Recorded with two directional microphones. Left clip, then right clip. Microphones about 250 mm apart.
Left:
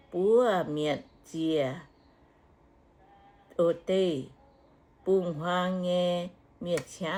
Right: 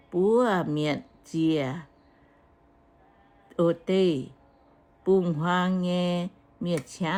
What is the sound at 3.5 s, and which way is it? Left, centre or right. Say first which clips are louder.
Speech: right 1 dB; right.